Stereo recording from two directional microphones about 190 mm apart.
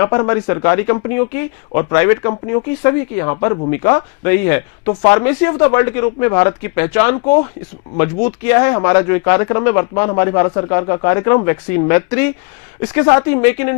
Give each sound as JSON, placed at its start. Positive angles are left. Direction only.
{"t": 0.0, "sound": "speech", "side_deg": 20}